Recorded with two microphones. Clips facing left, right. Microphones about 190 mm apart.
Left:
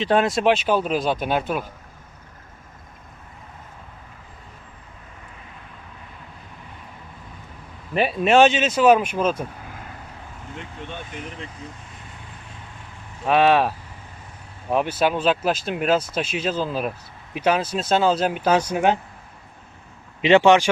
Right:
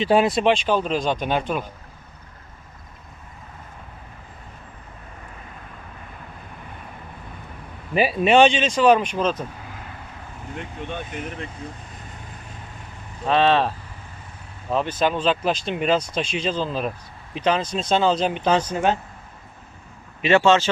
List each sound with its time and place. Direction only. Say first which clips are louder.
0.0 s speech: right 1 dB; 5° right (ahead or behind)
7.9 s speech: even; 5° right (ahead or behind)
10.5 s speech: right 4 dB; 55° right (ahead or behind)
13.2 s speech: left 1 dB; 10° left (ahead or behind)
20.2 s speech: left 2 dB; 15° left (ahead or behind)